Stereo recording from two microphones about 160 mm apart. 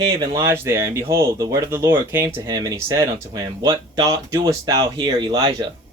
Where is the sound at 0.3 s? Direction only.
15° right (ahead or behind).